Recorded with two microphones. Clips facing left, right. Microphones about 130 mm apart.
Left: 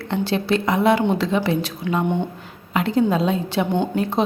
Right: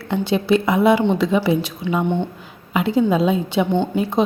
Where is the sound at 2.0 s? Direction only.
10° left (ahead or behind).